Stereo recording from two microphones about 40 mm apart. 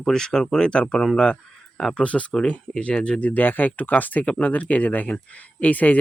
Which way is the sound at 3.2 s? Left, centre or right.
Left.